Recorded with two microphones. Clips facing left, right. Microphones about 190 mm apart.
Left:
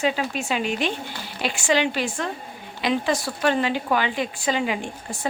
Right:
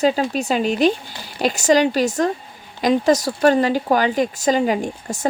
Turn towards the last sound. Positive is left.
turn(degrees=-40)  # may be behind; listen again after turning